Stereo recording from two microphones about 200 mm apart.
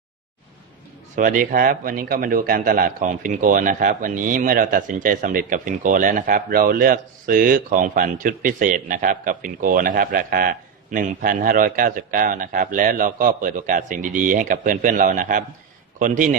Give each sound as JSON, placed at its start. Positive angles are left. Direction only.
{"t": 1.1, "sound": "a man's voice", "side_deg": -40}